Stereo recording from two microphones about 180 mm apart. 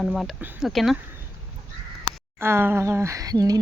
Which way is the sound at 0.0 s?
Centre (ahead or behind).